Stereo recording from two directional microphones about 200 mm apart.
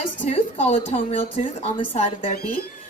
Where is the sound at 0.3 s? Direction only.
30° left (ahead or behind).